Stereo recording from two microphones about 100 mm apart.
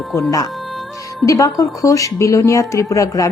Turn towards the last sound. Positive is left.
turn(degrees=35)  # may be behind; listen again after turning